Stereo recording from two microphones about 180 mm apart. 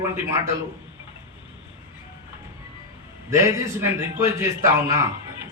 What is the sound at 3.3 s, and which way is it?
A man's voice, 15° right (ahead or behind).